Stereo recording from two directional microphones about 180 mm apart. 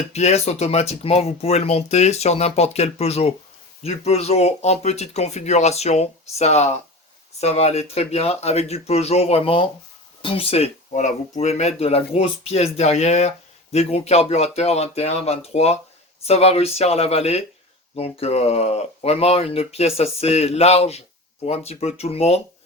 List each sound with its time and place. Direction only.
0.1 s speech: 35° left (ahead or behind)